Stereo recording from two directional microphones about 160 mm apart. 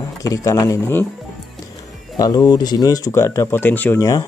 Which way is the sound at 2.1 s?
25° left (ahead or behind).